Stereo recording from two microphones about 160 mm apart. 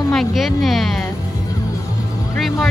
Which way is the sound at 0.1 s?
Centre (ahead or behind).